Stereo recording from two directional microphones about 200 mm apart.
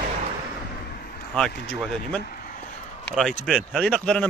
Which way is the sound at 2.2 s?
45° left (ahead or behind).